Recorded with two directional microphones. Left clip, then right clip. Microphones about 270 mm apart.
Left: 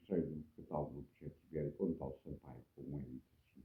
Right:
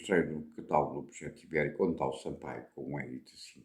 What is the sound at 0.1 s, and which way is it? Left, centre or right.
Speech, centre.